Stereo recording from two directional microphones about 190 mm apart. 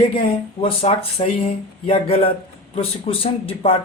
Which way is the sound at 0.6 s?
30° left (ahead or behind).